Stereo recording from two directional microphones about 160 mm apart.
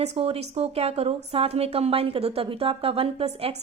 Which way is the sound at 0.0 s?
40° right (ahead or behind).